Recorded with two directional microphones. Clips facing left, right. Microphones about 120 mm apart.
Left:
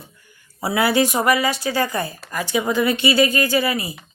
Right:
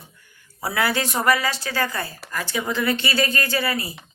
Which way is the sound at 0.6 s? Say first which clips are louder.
Left 5 dB; 10° left (ahead or behind).